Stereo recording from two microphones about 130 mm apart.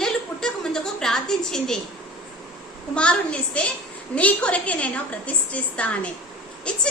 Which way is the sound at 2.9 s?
10° left (ahead or behind).